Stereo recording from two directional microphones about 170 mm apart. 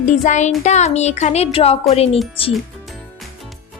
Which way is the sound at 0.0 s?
45° left (ahead or behind).